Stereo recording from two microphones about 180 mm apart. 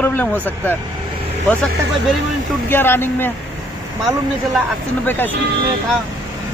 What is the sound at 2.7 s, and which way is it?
Speech, 10° left (ahead or behind).